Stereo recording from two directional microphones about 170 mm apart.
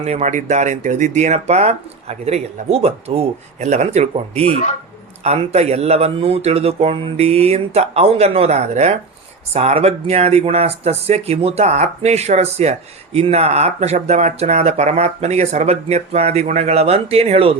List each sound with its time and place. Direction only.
0.0 s speech: 40° right (ahead or behind)